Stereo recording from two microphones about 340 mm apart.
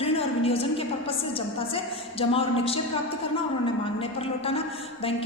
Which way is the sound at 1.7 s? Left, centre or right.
Centre.